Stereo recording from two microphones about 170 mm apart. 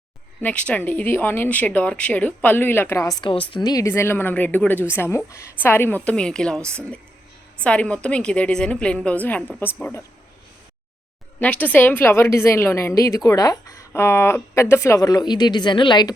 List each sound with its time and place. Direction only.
0.4 s speech: 10° left (ahead or behind)
11.3 s speech: 10° left (ahead or behind); by 16.1 s 25° left (ahead or behind)